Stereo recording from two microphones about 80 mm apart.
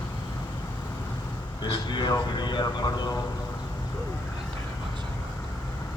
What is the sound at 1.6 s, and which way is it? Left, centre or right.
Speech, left.